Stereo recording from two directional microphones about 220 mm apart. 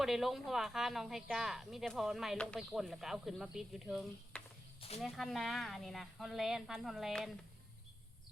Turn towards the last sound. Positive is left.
turn(degrees=0)  # may be behind; listen again after turning